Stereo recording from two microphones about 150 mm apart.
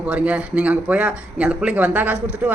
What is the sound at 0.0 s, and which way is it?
Speech, 10° right (ahead or behind).